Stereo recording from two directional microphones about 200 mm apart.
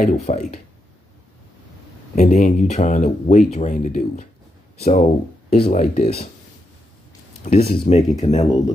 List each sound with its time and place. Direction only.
0.0 s speech: 35° left (ahead or behind)
2.1 s speech: 40° left (ahead or behind)
7.7 s speech: 30° left (ahead or behind)